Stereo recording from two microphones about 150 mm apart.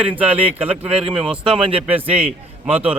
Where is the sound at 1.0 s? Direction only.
40° right (ahead or behind).